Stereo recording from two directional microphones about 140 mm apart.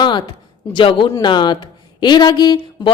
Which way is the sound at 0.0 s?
35° left (ahead or behind).